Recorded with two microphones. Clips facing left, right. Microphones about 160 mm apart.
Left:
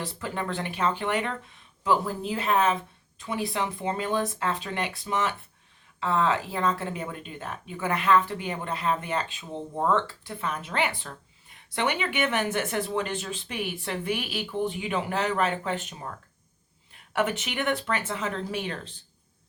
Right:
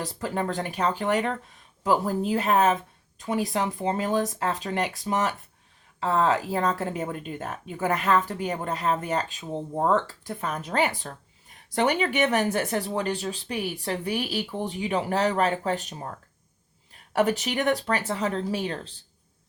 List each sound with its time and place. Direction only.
0.0 s speech: 40° right (ahead or behind)